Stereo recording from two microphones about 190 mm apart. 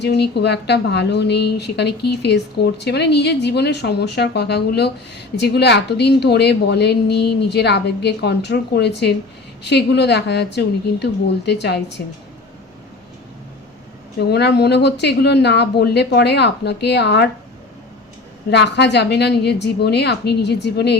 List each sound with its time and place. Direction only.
0.0 s a woman's voice: 60° left (ahead or behind)
14.2 s a woman's voice: 60° left (ahead or behind)
18.5 s a woman's voice: 65° left (ahead or behind)